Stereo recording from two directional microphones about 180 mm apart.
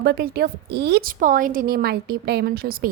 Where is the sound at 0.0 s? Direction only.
60° right (ahead or behind).